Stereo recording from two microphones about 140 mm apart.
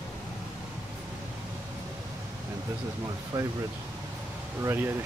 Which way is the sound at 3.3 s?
25° right (ahead or behind).